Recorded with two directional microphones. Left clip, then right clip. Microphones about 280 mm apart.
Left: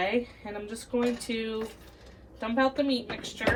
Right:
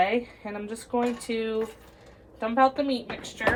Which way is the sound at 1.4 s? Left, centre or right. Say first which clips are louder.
Right 5 dB; centre.